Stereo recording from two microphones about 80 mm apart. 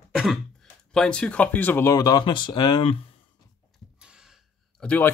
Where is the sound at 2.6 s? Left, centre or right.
Left.